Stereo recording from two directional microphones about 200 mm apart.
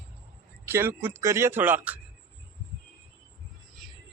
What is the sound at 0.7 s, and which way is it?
Speech, 10° right (ahead or behind).